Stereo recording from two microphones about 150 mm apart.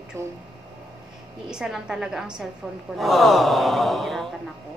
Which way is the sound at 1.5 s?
5° right (ahead or behind).